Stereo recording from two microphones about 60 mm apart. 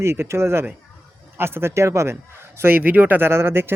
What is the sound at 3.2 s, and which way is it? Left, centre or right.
Speech, right.